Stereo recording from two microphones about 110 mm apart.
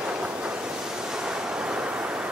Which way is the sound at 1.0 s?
5° right (ahead or behind).